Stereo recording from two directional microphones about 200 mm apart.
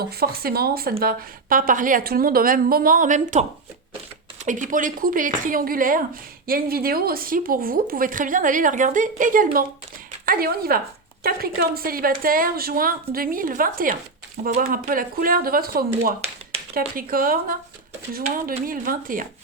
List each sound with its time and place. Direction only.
0.0 s a woman's voice: 50° right (ahead or behind)
4.4 s a woman's voice: 40° right (ahead or behind)